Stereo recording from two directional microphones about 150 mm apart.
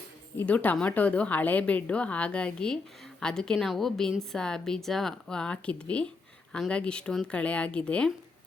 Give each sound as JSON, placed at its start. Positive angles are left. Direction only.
{"t": 0.3, "sound": "a woman's voice", "side_deg": 10}